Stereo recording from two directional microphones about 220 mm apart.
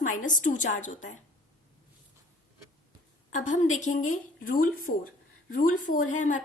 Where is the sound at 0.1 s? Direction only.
35° left (ahead or behind).